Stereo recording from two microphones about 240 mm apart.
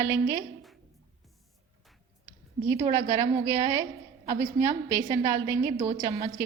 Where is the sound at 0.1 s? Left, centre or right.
Centre.